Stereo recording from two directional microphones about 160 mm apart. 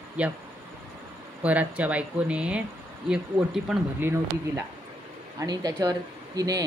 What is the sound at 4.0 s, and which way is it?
Speech, 15° right (ahead or behind).